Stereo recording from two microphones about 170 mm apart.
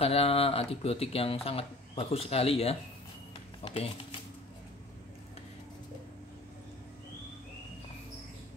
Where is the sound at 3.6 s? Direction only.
30° left (ahead or behind).